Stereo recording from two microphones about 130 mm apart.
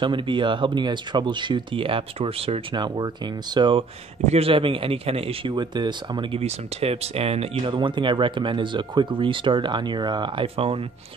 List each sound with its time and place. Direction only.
0.0 s speech: 40° right (ahead or behind)
5.5 s speech: 35° right (ahead or behind)
6.4 s speech: 55° right (ahead or behind)